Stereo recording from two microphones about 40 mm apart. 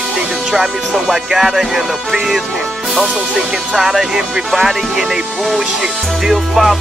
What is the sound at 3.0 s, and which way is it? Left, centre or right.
Speech, right.